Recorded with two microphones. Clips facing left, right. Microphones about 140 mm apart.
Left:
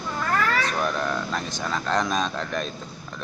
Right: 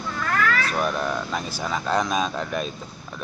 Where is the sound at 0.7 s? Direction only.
10° right (ahead or behind).